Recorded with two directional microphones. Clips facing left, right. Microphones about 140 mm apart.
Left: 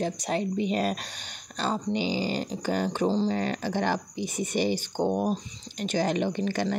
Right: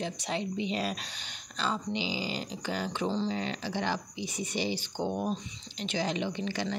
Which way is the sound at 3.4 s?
50° left (ahead or behind).